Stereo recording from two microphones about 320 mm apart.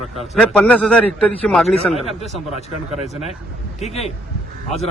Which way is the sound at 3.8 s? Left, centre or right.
Centre.